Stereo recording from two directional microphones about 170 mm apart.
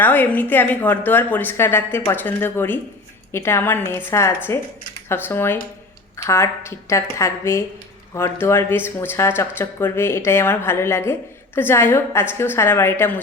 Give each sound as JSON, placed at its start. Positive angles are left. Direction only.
{"t": 0.0, "sound": "speech", "side_deg": 10}